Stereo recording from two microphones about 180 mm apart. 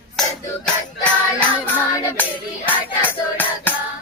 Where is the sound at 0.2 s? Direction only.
5° left (ahead or behind).